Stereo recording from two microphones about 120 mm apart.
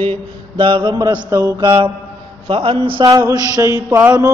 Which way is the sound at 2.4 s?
50° right (ahead or behind).